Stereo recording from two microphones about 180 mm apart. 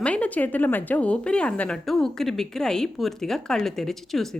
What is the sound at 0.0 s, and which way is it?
A woman's voice, 5° left (ahead or behind).